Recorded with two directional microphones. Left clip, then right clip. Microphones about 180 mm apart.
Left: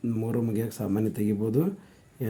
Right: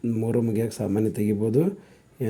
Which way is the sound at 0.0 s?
10° right (ahead or behind).